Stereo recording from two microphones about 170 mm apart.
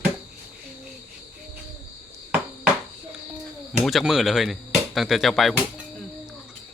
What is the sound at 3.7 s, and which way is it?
Speech, centre (ahead or behind).